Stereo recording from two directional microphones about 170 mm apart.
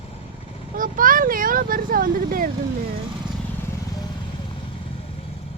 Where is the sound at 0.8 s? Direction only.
55° right (ahead or behind).